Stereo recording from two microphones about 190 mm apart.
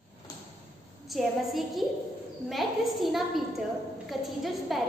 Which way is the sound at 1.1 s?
Centre (ahead or behind).